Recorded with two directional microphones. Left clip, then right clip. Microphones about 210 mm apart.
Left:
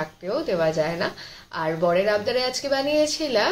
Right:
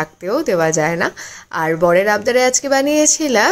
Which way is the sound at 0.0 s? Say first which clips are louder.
Right 8 dB; 55° right (ahead or behind).